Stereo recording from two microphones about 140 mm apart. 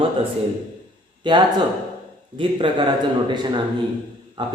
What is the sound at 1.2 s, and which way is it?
A man's voice, 35° right (ahead or behind).